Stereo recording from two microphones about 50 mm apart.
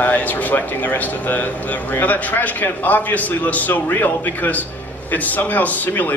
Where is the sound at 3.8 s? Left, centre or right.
Left.